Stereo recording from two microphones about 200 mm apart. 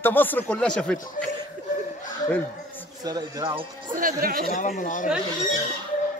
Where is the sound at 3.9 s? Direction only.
45° right (ahead or behind).